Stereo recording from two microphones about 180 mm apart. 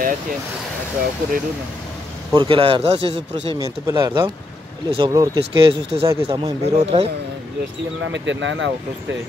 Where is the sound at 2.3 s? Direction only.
30° right (ahead or behind).